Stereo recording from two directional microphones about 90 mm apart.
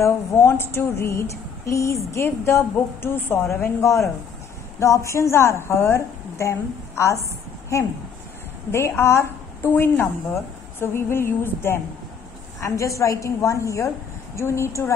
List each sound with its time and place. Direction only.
0.0 s a woman's voice: 30° left (ahead or behind)
8.7 s a woman's voice: 30° left (ahead or behind)